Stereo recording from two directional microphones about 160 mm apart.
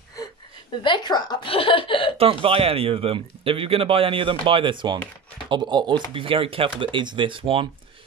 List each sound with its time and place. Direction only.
0.8 s a woman's voice: 30° left (ahead or behind)
2.1 s speech: 35° right (ahead or behind)